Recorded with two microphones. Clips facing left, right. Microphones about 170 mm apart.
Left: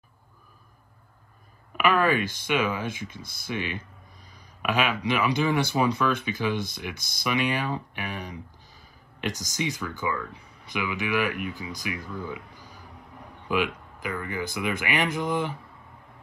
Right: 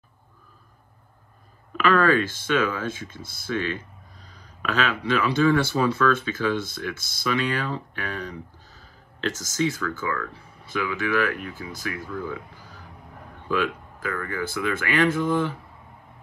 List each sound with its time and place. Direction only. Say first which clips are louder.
1.8 s speech: right 3 dB; 15° left (ahead or behind)